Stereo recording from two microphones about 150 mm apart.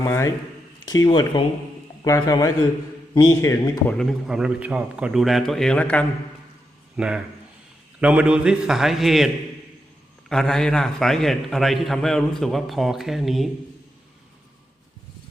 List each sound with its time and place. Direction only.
0.0 s speech: 20° left (ahead or behind)
3.8 s a man's voice: 5° left (ahead or behind)
6.9 s a man's voice: 5° right (ahead or behind)